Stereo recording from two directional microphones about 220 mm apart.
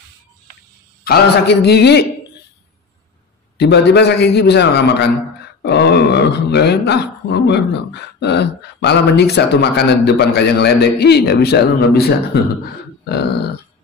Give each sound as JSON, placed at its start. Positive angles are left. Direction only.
{"t": 1.0, "sound": "speech", "side_deg": 45}
{"t": 3.5, "sound": "speech", "side_deg": 50}